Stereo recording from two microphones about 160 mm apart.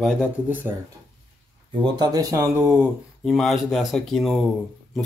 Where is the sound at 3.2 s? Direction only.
Centre (ahead or behind).